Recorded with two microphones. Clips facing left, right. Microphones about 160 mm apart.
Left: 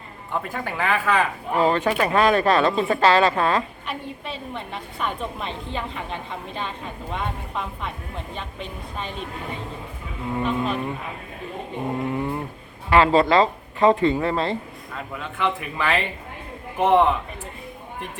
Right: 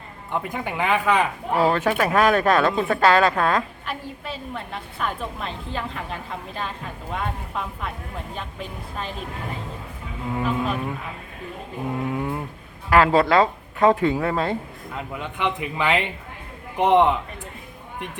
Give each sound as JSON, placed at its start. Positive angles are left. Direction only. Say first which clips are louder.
{"t": 0.4, "sound": "speech", "louder": "right 1 dB", "side_deg": -15}
{"t": 1.6, "sound": "a woman's voice", "louder": "even", "side_deg": -5}
{"t": 10.3, "sound": "insect", "louder": "even", "side_deg": -5}
{"t": 12.0, "sound": "a sound", "louder": "right 1 dB", "side_deg": -5}
{"t": 12.9, "sound": "a woman's voice", "louder": "even", "side_deg": -5}
{"t": 14.9, "sound": "speech", "louder": "right 1 dB", "side_deg": -20}